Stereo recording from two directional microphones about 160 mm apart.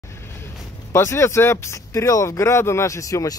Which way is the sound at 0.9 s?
15° left (ahead or behind).